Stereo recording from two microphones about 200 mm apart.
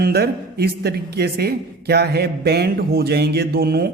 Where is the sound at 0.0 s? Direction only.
55° right (ahead or behind).